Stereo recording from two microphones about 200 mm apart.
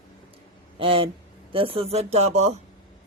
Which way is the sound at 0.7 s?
25° right (ahead or behind).